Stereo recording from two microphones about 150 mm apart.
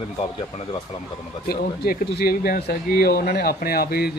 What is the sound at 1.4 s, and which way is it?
Speech, 85° left.